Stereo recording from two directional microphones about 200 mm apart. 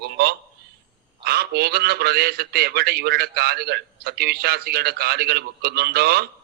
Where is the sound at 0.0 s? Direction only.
55° right (ahead or behind).